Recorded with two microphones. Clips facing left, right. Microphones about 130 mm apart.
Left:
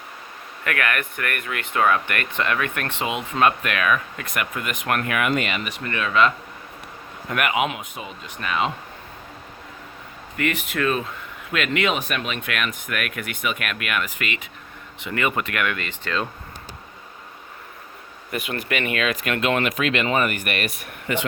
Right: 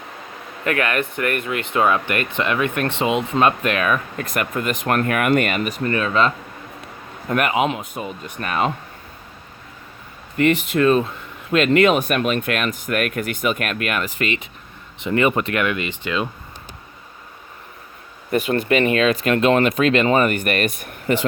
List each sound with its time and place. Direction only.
0.6 s speech: 25° right (ahead or behind)
7.9 s speech: 45° right (ahead or behind)
10.3 s speech: 30° right (ahead or behind); by 16.3 s 10° right (ahead or behind)
18.3 s speech: 35° right (ahead or behind)